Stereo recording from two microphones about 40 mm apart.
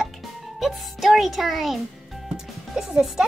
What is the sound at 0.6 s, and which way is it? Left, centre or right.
A child's voice, centre.